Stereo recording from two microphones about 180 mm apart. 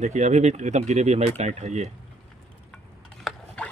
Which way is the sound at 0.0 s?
40° right (ahead or behind).